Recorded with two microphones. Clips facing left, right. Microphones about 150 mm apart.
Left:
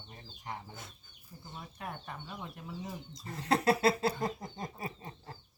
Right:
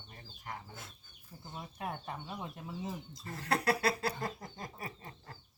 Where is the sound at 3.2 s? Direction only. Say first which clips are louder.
Left 4 dB; 20° left (ahead or behind).